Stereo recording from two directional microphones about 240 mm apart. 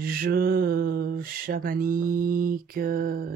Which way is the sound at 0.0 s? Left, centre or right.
Right.